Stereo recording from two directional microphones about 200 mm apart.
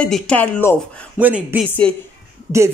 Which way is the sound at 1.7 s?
5° left (ahead or behind).